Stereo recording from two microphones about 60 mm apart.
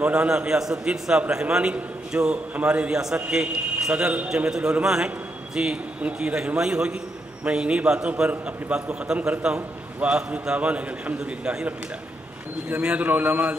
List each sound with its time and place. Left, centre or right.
0.0 s a man's voice: centre
4.5 s a man's voice: centre